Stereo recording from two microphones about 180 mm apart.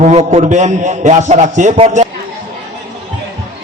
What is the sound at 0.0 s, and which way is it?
A man's voice, 40° right (ahead or behind).